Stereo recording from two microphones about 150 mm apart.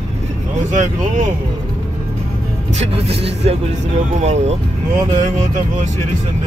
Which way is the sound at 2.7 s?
40° right (ahead or behind).